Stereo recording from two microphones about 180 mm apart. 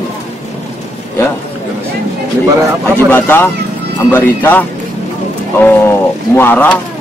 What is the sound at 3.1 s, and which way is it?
Speech, 10° left (ahead or behind).